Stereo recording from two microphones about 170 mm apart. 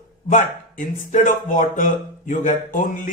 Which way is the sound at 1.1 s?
50° left (ahead or behind).